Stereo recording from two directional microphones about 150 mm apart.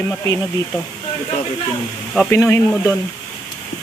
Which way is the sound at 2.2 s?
15° left (ahead or behind).